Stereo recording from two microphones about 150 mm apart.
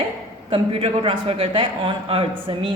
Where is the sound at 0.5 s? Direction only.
40° right (ahead or behind).